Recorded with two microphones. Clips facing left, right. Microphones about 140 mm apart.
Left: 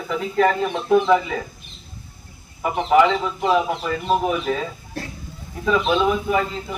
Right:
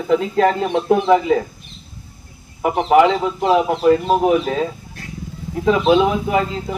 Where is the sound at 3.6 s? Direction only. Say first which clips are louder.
Right 10 dB; 50° right (ahead or behind).